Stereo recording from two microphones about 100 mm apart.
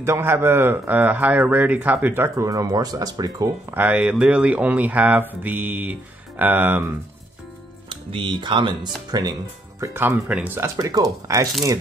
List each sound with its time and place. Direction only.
0.0 s speech: 25° right (ahead or behind)
3.7 s speech: 15° right (ahead or behind)
8.1 s speech: 60° right (ahead or behind); by 10.7 s 20° right (ahead or behind)
10.8 s speech: 35° right (ahead or behind)